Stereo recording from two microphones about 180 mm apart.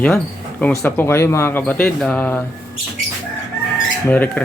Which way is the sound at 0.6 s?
10° left (ahead or behind).